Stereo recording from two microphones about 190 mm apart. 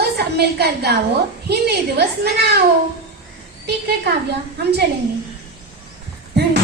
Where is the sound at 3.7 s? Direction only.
60° right (ahead or behind).